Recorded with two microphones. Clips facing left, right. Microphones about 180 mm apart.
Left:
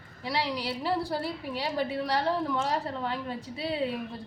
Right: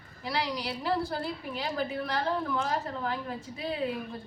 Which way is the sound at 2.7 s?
30° left (ahead or behind).